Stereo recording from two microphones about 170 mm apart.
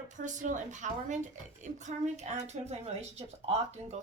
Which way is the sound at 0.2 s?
50° right (ahead or behind).